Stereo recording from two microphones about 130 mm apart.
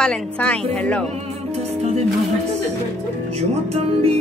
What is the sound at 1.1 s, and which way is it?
Music, 55° right (ahead or behind).